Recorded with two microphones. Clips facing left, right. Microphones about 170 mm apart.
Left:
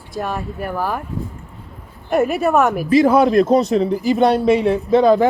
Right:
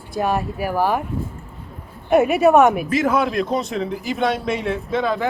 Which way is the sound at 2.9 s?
35° left (ahead or behind).